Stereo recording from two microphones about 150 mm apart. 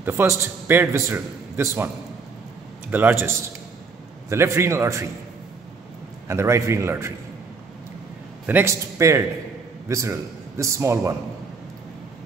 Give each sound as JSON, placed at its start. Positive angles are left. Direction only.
{"t": 0.0, "sound": "a man's voice", "side_deg": -15}
{"t": 2.9, "sound": "a man's voice", "side_deg": -15}
{"t": 6.2, "sound": "a man's voice", "side_deg": -20}
{"t": 8.5, "sound": "a man's voice", "side_deg": -15}